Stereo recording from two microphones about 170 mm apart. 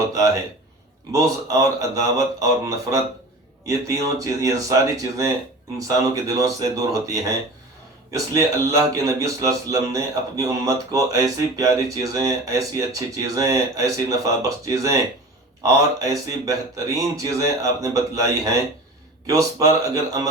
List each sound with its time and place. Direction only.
1.1 s a man's voice: 20° right (ahead or behind)
16.0 s a man's voice: 20° right (ahead or behind)